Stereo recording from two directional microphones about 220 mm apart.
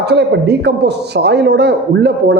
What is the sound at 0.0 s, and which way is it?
A man's voice, 50° right (ahead or behind).